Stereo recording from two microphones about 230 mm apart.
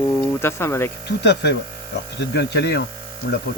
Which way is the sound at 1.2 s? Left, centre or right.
Left.